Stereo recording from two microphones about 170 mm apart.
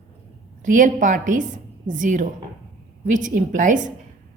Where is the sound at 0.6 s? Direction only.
50° right (ahead or behind).